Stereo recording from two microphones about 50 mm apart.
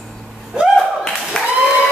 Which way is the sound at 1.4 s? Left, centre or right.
Centre.